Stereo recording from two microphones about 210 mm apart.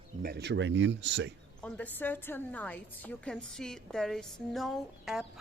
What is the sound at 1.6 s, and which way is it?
A woman's voice, 10° left (ahead or behind).